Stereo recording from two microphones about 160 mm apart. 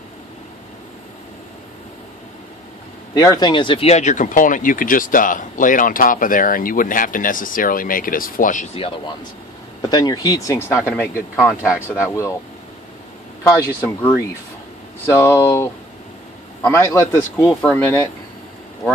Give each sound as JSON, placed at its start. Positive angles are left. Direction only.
{"t": 3.2, "sound": "speech", "side_deg": 25}
{"t": 8.7, "sound": "a man's voice", "side_deg": 35}
{"t": 13.7, "sound": "a man's voice", "side_deg": 15}
{"t": 17.5, "sound": "speech", "side_deg": 5}